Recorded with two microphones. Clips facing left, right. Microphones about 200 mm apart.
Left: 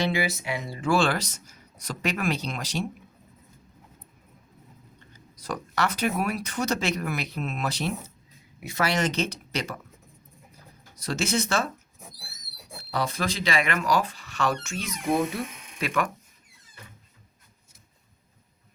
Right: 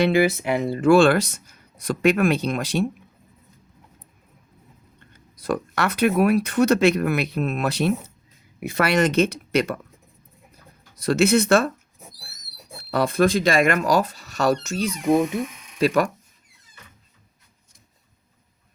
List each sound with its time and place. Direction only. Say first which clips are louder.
0.1 s speech: right 9 dB; 55° right (ahead or behind)
4.9 s speech: even; 55° right (ahead or behind)
11.0 s speech: right 9 dB; 60° right (ahead or behind)
12.9 s speech: right 10 dB; 55° right (ahead or behind); by 15.0 s 35° right (ahead or behind)
15.0 s speech: right 5 dB; 20° right (ahead or behind)
15.8 s speech: right 8 dB; 40° right (ahead or behind)